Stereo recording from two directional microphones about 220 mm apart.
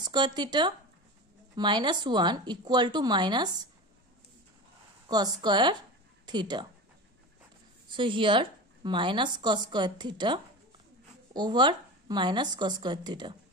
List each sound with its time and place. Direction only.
0.0 s a woman's voice: 20° right (ahead or behind)
5.0 s a woman's voice: 20° right (ahead or behind)
7.9 s a woman's voice: 20° right (ahead or behind)